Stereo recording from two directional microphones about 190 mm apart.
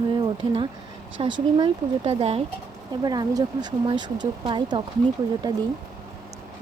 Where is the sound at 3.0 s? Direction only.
20° right (ahead or behind).